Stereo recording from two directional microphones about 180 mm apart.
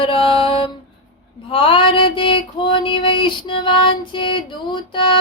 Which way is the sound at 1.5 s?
30° left (ahead or behind).